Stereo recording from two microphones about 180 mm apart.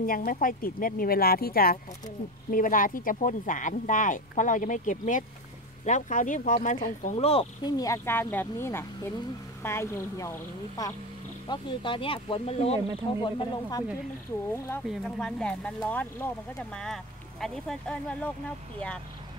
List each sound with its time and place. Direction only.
0.0 s speech: 55° left (ahead or behind); by 7.4 s 35° left (ahead or behind)
7.6 s a woman's voice: 20° left (ahead or behind)
13.2 s speech: 20° left (ahead or behind)
14.8 s speech: centre (ahead or behind)